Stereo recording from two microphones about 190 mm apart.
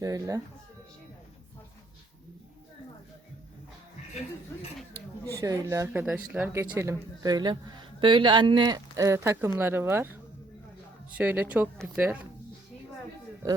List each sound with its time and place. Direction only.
0.0 s speech: 15° right (ahead or behind)
5.3 s speech: 15° right (ahead or behind)
11.1 s speech: 10° right (ahead or behind)